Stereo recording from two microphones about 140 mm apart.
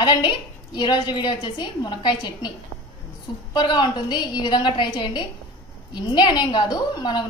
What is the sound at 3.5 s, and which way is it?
A woman's voice, 35° left (ahead or behind).